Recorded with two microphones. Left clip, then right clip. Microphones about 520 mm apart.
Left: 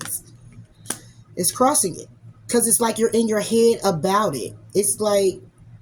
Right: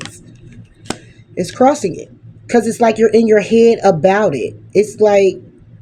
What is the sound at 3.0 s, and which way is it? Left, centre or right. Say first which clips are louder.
Speech: right 8 dB; left.